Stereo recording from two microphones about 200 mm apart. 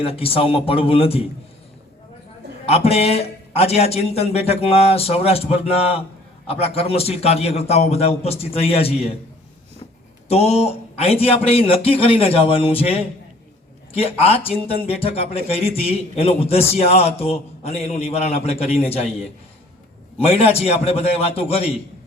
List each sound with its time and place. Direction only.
0.0 s speech: 30° left (ahead or behind)
2.6 s a man's voice: 30° left (ahead or behind)
10.2 s speech: 30° left (ahead or behind)
20.1 s speech: 30° left (ahead or behind)